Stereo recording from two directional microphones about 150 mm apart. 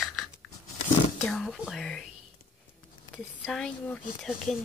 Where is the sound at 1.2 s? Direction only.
Centre (ahead or behind).